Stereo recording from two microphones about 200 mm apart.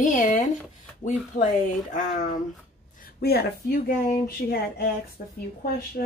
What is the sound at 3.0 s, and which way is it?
A woman's voice, 50° left (ahead or behind).